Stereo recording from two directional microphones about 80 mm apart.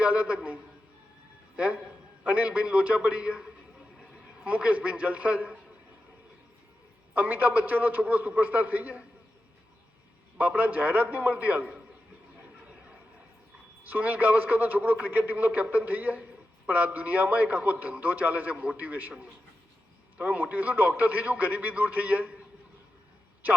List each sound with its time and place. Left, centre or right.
0.0 s a man's voice: centre
7.1 s a man's voice: right
10.3 s a man's voice: centre
13.8 s a man's voice: right
20.1 s a man's voice: centre